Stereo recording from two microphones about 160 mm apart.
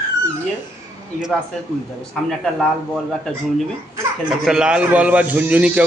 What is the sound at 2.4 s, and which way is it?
Speech, centre (ahead or behind).